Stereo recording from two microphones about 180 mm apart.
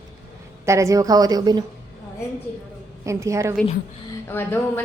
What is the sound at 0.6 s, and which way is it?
Speech, 15° right (ahead or behind).